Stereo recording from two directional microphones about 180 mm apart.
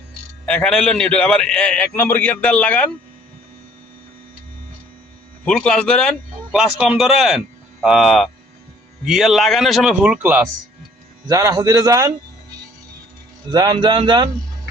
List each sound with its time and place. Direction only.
0.4 s a man's voice: 5° left (ahead or behind)
5.5 s speech: 5° left (ahead or behind)
11.3 s a man's voice: 20° right (ahead or behind)
13.5 s a man's voice: 25° right (ahead or behind)